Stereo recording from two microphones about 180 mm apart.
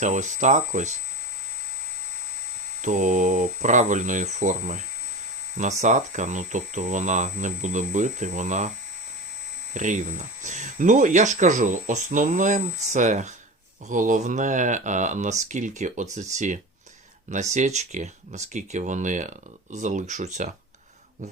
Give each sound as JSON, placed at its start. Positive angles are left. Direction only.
{"t": 0.0, "sound": "speech", "side_deg": -40}
{"t": 2.8, "sound": "speech", "side_deg": -45}
{"t": 5.8, "sound": "speech", "side_deg": -40}
{"t": 9.7, "sound": "speech", "side_deg": -45}